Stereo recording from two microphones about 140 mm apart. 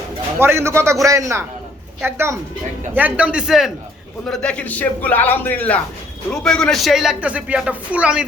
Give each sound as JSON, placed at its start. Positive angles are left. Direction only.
{"t": 0.3, "sound": "a man's voice", "side_deg": -15}
{"t": 4.3, "sound": "a man's voice", "side_deg": 5}